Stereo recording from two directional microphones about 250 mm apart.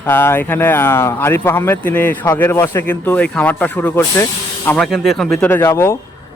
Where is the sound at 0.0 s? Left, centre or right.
Centre.